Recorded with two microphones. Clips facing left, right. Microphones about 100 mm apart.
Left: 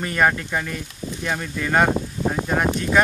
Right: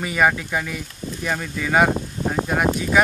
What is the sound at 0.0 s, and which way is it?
Speech, 5° right (ahead or behind).